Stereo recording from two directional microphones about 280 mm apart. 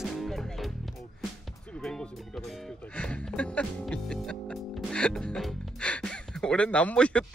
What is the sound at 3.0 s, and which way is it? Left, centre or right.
Music, centre.